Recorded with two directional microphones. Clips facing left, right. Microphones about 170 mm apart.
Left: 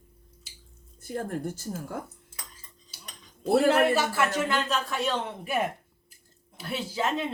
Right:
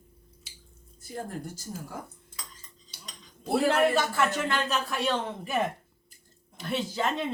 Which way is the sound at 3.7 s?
5° left (ahead or behind).